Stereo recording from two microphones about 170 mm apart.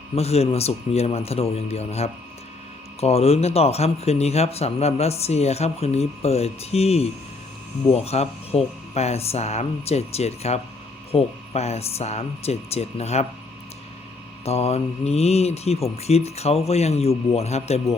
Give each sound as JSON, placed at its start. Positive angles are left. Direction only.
{"t": 0.2, "sound": "speech", "side_deg": 35}
{"t": 14.4, "sound": "speech", "side_deg": 40}